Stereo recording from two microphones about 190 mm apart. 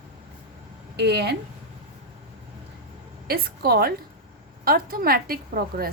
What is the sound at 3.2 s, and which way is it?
A woman's voice, 55° right (ahead or behind).